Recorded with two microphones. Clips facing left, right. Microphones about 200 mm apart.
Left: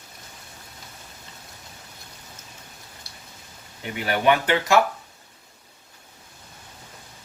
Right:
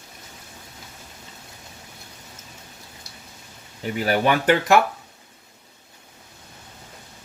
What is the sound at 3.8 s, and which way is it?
Speech, 40° right (ahead or behind).